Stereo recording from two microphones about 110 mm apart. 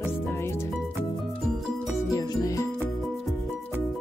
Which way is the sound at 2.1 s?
30° left (ahead or behind).